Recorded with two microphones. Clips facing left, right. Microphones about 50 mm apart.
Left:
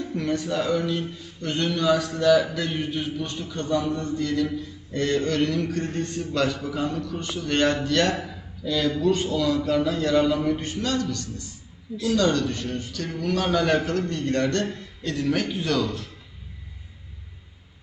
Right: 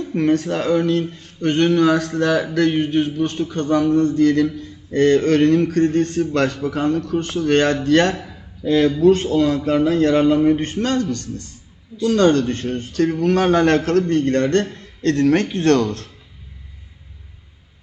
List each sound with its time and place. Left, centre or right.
0.1 s a man's voice: right
2.6 s a man's voice: right
14.1 s a man's voice: right
15.0 s speech: right